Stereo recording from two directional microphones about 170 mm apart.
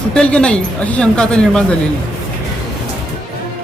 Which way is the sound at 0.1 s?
5° left (ahead or behind).